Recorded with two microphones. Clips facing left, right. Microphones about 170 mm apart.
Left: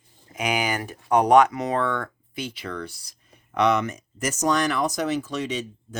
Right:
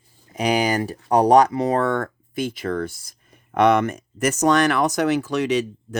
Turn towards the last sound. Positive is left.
turn(degrees=-70)  # may be behind; listen again after turning